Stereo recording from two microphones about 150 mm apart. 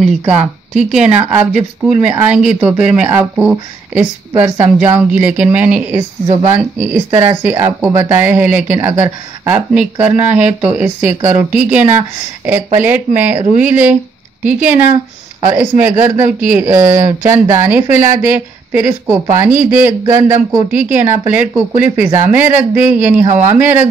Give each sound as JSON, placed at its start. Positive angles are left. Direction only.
{"t": 0.3, "sound": "speech", "side_deg": -5}